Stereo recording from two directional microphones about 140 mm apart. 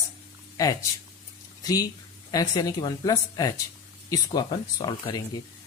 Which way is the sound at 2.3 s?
30° left (ahead or behind).